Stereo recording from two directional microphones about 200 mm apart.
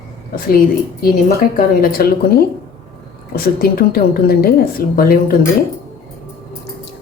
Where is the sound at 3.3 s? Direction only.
45° left (ahead or behind).